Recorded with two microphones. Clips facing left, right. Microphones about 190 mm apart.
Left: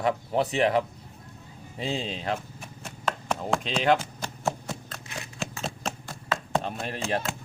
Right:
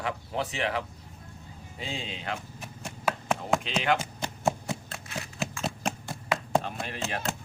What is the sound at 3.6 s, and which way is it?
Speech, 40° left (ahead or behind).